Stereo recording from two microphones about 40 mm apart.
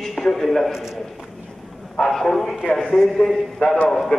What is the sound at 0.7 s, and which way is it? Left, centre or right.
Speech, centre.